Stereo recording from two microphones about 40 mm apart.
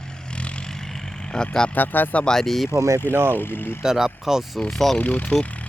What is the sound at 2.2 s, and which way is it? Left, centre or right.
Speech, centre.